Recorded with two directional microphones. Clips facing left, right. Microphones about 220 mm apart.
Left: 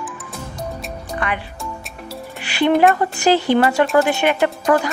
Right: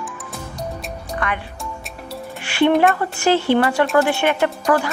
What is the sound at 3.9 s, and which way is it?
A woman's voice, 20° left (ahead or behind).